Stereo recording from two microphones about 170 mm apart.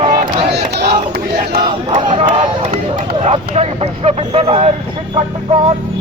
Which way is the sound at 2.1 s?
35° right (ahead or behind).